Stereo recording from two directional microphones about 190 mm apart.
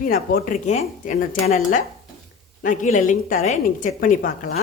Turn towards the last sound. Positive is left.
turn(degrees=45)  # may be behind; listen again after turning